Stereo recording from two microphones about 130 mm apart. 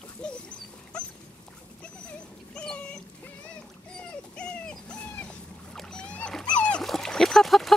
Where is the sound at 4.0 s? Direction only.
5° left (ahead or behind).